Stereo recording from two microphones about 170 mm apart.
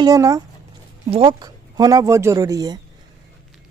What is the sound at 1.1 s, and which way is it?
Speech, 30° right (ahead or behind).